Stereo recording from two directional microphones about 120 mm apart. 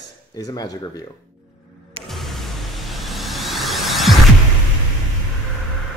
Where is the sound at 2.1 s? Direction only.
Centre (ahead or behind).